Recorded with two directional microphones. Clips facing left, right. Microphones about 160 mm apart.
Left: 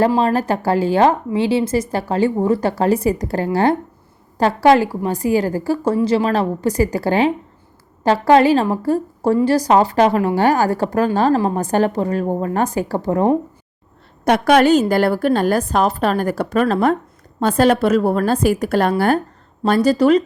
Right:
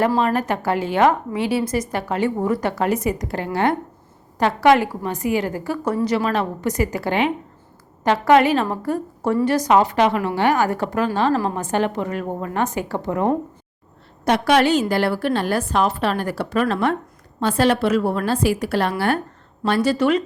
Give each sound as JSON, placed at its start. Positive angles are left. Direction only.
{"t": 0.2, "sound": "a woman's voice", "side_deg": 35}
{"t": 14.3, "sound": "a woman's voice", "side_deg": 50}